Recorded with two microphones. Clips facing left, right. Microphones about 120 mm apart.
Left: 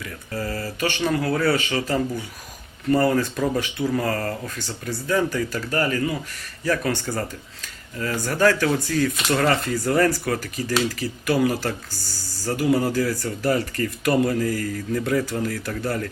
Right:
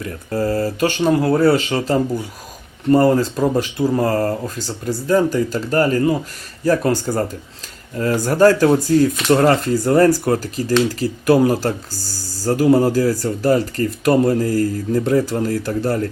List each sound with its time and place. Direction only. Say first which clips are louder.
0.0 s speech: right 9 dB; 35° right (ahead or behind)